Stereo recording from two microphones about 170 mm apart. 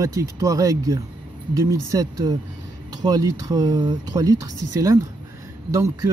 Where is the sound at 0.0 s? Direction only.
20° right (ahead or behind).